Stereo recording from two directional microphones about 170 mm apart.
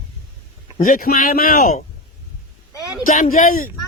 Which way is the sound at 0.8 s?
55° left (ahead or behind).